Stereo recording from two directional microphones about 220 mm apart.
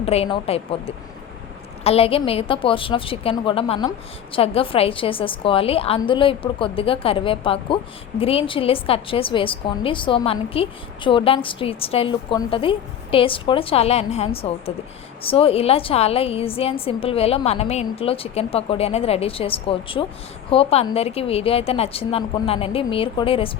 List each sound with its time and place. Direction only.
0.0 s a woman's voice: 25° left (ahead or behind)